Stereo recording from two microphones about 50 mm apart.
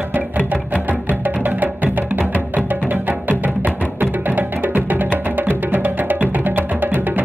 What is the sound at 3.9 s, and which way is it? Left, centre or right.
Music, right.